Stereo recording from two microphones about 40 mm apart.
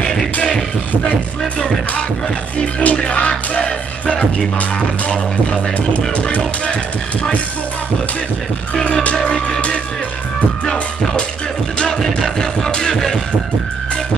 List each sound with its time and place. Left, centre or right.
0.0 s music: centre
2.6 s music: left
6.1 s music: left
9.2 s music: left
10.6 s music: left